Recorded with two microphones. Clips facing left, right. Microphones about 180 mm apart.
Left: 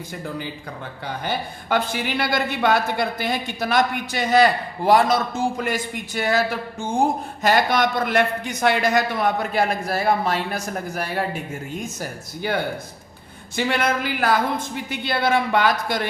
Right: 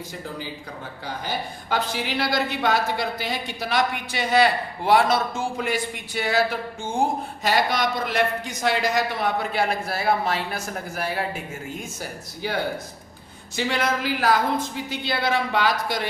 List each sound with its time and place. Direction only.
1.7 s a woman's voice: 55° left (ahead or behind)
7.4 s a woman's voice: 50° left (ahead or behind)
11.9 s speech: 55° left (ahead or behind)
13.6 s a woman's voice: 55° left (ahead or behind)